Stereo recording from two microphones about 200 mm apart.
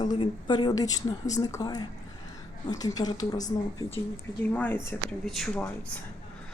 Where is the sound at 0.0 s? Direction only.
25° left (ahead or behind).